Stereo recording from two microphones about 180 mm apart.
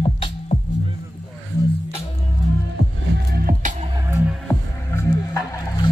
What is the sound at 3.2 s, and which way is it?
Music, 55° right (ahead or behind).